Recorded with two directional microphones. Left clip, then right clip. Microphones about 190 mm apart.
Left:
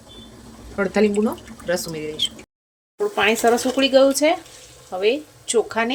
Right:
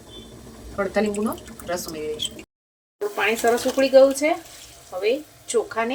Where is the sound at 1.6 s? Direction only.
45° left (ahead or behind).